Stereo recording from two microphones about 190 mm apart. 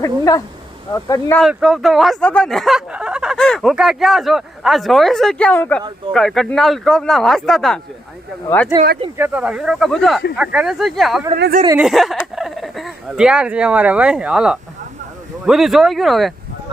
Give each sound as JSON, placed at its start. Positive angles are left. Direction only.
{"t": 0.0, "sound": "speech", "side_deg": 20}
{"t": 1.4, "sound": "speech", "side_deg": 0}
{"t": 8.7, "sound": "speech", "side_deg": -10}
{"t": 11.3, "sound": "speech", "side_deg": -60}
{"t": 11.8, "sound": "speech", "side_deg": 0}